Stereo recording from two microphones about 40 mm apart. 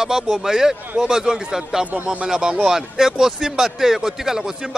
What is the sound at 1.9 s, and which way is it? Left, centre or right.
Speech, right.